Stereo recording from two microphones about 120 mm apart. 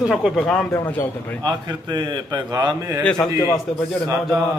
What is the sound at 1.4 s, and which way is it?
A man's voice, 35° right (ahead or behind).